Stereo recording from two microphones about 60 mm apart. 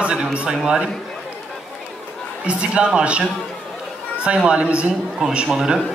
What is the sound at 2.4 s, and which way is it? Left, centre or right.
Speech, centre.